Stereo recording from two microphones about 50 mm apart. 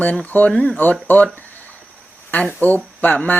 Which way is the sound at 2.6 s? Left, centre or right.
Left.